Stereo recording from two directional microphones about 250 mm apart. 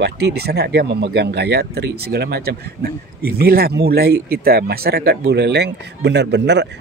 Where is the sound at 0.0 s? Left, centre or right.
Right.